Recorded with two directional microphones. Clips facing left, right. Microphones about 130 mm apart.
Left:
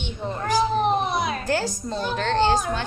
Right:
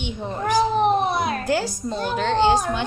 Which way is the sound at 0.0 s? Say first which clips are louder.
Right 2 dB; 15° right (ahead or behind).